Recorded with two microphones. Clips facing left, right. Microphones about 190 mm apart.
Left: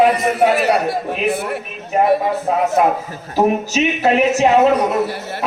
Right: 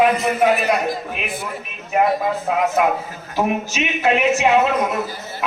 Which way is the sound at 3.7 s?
35° left (ahead or behind).